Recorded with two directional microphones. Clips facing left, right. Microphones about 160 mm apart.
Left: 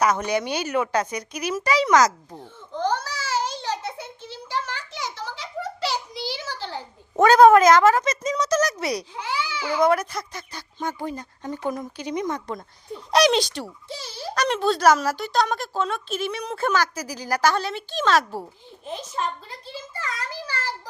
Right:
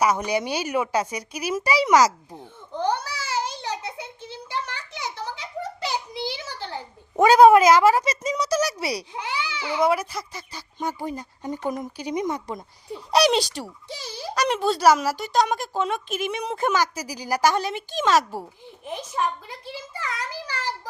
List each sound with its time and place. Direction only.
0.0 s speech: 10° right (ahead or behind)
2.4 s babbling: 15° right (ahead or behind)
5.8 s a sound: 20° right (ahead or behind)
9.2 s babbling: 15° right (ahead or behind)
9.8 s speech: 5° right (ahead or behind)
18.9 s a sound: 15° right (ahead or behind)